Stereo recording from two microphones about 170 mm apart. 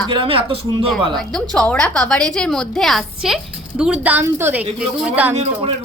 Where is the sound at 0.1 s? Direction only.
35° right (ahead or behind).